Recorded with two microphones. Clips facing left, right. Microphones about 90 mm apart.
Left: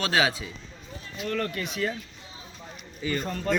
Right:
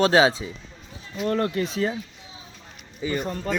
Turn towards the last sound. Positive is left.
turn(degrees=-15)  # may be behind; listen again after turning